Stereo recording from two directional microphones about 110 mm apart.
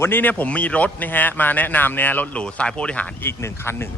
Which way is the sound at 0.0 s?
20° left (ahead or behind).